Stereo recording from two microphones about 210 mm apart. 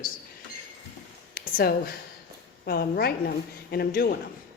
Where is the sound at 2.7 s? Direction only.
45° left (ahead or behind).